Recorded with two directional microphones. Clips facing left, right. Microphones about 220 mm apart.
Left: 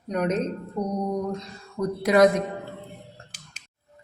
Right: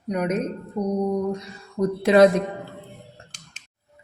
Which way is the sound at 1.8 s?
25° right (ahead or behind).